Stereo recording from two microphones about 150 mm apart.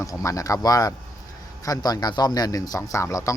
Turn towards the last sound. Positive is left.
turn(degrees=20)  # may be behind; listen again after turning